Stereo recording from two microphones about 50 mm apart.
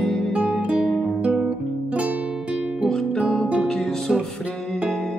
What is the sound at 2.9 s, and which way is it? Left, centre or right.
Music, centre.